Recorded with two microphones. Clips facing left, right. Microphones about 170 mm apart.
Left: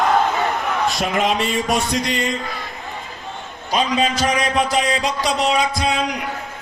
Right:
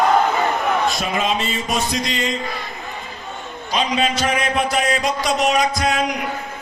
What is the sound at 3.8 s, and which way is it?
A man's voice, 40° left (ahead or behind).